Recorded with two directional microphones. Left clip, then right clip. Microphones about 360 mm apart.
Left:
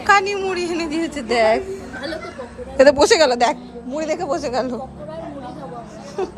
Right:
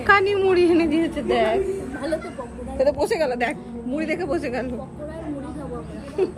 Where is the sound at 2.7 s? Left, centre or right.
Left; by 4.3 s centre.